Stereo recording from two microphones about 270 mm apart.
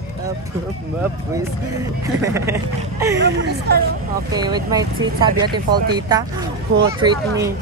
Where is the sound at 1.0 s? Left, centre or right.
Centre.